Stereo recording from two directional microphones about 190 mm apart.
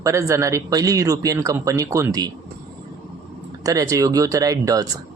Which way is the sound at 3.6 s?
15° right (ahead or behind).